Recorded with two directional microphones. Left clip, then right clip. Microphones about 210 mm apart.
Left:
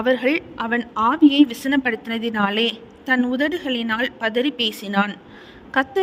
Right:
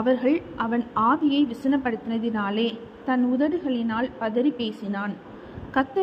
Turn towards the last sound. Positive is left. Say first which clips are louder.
# left 4 dB
turn(degrees=45)  # may be behind; listen again after turning